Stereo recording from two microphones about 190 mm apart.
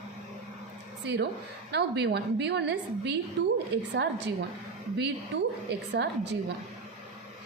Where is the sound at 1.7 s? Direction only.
60° right (ahead or behind).